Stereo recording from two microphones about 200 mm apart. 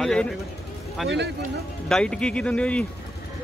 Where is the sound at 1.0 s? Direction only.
55° right (ahead or behind).